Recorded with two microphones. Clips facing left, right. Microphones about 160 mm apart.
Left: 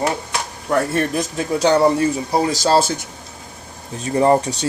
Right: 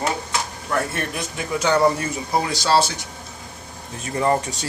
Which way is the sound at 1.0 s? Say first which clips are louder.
Left 7 dB; 35° left (ahead or behind).